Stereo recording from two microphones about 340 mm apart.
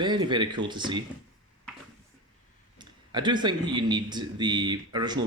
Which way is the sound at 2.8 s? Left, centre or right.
Centre.